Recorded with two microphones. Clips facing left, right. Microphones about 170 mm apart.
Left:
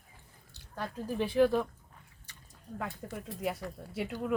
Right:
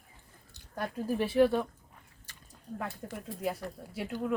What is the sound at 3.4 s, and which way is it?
Speech, centre (ahead or behind).